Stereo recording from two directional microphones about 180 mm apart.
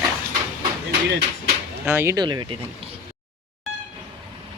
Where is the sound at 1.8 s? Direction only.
15° right (ahead or behind).